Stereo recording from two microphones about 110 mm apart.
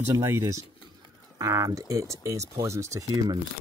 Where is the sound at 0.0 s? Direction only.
25° right (ahead or behind).